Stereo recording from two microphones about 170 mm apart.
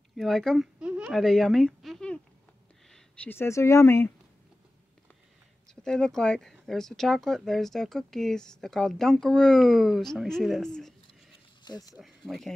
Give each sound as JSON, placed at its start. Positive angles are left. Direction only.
{"t": 0.1, "sound": "speech", "side_deg": 0}
{"t": 5.8, "sound": "speech", "side_deg": 5}
{"t": 11.6, "sound": "speech", "side_deg": 25}
{"t": 12.0, "sound": "speech", "side_deg": 0}